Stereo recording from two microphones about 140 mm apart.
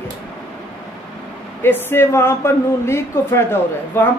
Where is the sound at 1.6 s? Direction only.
15° left (ahead or behind).